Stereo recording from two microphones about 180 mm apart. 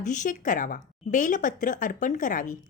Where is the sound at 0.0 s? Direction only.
45° left (ahead or behind).